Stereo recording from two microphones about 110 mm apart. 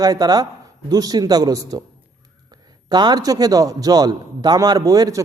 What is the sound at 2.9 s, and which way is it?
A man's voice, 40° right (ahead or behind).